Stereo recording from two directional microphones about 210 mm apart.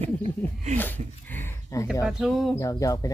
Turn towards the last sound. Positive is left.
turn(degrees=15)  # may be behind; listen again after turning